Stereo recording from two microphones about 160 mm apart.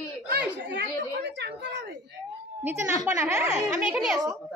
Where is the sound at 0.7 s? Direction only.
90° right.